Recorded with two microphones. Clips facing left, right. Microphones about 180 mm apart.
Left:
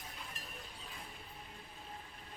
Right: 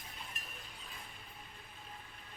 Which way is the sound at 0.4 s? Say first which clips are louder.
Left 1 dB; 35° left (ahead or behind).